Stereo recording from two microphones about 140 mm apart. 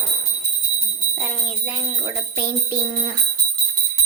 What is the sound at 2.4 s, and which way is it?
Jingle bell, 20° right (ahead or behind).